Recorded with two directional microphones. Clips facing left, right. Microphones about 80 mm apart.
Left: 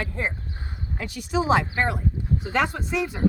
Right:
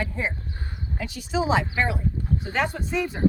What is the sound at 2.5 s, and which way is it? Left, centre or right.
Speech, left.